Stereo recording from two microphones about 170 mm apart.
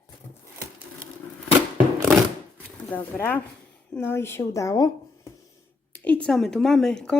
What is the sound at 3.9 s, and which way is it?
Speech, 10° left (ahead or behind).